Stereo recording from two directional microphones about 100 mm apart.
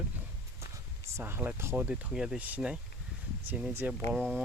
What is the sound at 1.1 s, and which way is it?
Speech, 20° right (ahead or behind).